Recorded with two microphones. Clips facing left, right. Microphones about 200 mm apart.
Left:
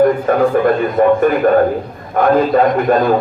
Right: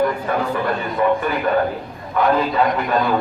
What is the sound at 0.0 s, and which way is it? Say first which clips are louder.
A man's voice: left 8 dB; 45° left (ahead or behind).